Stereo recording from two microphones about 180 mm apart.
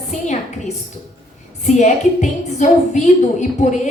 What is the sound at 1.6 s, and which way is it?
A woman's voice, 40° left (ahead or behind).